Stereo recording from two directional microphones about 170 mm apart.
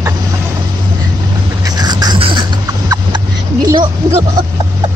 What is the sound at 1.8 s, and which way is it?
Beatboxing, 25° right (ahead or behind).